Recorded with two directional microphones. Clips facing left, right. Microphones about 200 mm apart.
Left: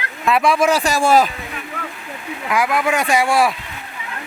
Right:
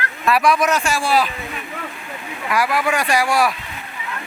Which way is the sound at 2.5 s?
20° left (ahead or behind).